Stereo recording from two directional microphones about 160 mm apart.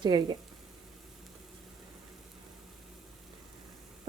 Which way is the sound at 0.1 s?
25° right (ahead or behind).